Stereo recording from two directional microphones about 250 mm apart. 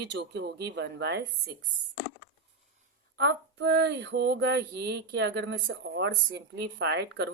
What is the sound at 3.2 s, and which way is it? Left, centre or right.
Female singing, right.